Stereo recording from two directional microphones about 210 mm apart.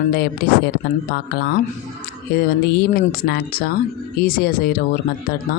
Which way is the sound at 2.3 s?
45° left (ahead or behind).